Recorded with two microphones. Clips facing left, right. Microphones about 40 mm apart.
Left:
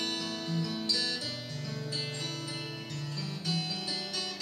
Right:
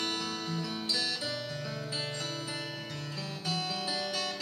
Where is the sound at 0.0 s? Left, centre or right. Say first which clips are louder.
Right 1 dB; centre.